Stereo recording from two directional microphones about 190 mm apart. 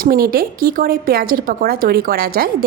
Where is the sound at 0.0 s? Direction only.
50° right (ahead or behind).